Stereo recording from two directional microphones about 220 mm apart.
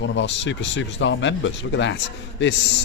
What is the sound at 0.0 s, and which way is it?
Speech, 55° left (ahead or behind).